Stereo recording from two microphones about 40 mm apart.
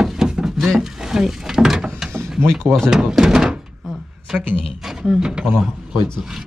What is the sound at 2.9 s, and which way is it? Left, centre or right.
Door, centre.